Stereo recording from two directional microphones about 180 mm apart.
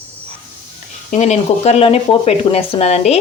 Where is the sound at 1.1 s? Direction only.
40° left (ahead or behind).